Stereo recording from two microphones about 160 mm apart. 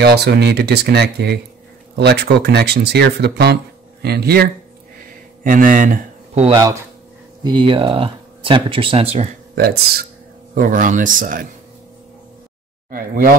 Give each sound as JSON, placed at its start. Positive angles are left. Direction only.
{"t": 0.0, "sound": "speech", "side_deg": -90}
{"t": 5.4, "sound": "speech", "side_deg": -55}
{"t": 7.4, "sound": "speech", "side_deg": -30}
{"t": 10.5, "sound": "speech", "side_deg": -55}
{"t": 12.9, "sound": "speech", "side_deg": -65}